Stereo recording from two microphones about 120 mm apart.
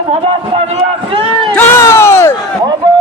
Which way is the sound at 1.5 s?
20° left (ahead or behind).